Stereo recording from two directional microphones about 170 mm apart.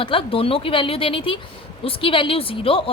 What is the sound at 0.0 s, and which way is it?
A woman's voice, 30° left (ahead or behind).